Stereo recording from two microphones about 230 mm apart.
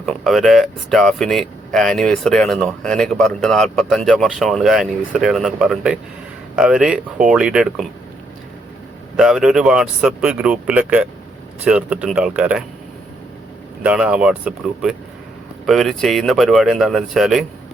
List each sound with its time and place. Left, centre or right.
0.0 s speech: centre
9.1 s speech: centre
13.8 s speech: centre